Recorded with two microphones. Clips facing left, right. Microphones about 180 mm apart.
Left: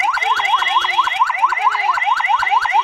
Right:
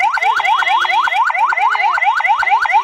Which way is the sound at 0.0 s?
90° right.